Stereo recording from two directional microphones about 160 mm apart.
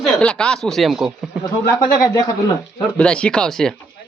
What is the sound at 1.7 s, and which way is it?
Speech, 20° left (ahead or behind).